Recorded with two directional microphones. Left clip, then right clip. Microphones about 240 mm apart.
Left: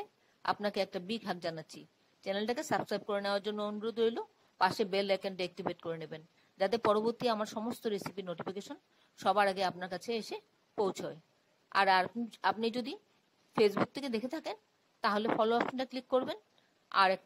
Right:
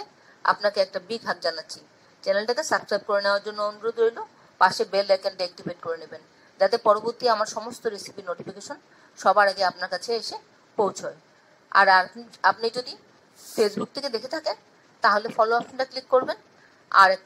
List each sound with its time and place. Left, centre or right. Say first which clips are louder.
0.4 s a woman's voice: right 12 dB; left